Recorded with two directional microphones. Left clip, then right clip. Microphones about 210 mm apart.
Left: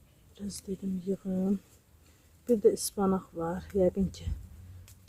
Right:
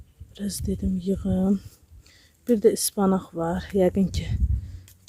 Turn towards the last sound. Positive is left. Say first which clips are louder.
# right 5 dB
turn(degrees=-30)  # may be behind; listen again after turning